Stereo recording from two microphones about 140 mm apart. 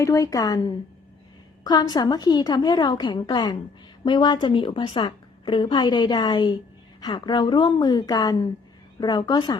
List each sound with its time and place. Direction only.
0.0 s a woman's voice: 20° left (ahead or behind)